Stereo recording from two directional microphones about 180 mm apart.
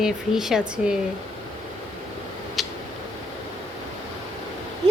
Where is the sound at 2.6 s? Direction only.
Centre (ahead or behind).